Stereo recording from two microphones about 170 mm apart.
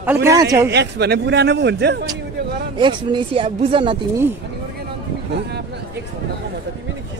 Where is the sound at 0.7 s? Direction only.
80° right.